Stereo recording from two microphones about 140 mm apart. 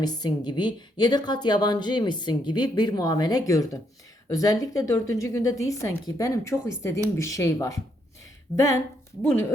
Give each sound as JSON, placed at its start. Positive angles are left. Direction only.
{"t": 0.0, "sound": "a woman's voice", "side_deg": 30}